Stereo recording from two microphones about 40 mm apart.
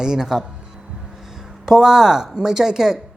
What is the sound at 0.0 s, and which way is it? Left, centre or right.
Speech, centre.